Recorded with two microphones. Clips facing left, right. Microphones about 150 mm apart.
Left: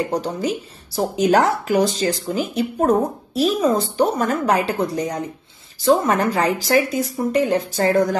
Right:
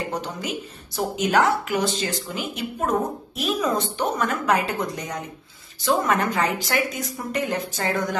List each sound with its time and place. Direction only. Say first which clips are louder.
0.1 s a woman's voice: left 7 dB; 35° left (ahead or behind)